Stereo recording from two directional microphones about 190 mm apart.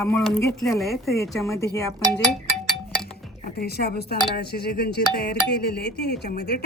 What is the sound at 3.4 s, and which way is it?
A woman's voice, 50° left (ahead or behind).